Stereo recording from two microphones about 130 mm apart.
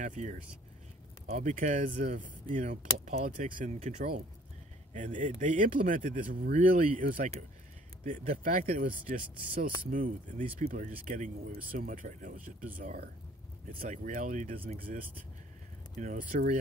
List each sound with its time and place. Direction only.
0.0 s speech: 70° right (ahead or behind); by 4.1 s 90° right
4.9 s speech: 80° right
13.7 s speech: 85° right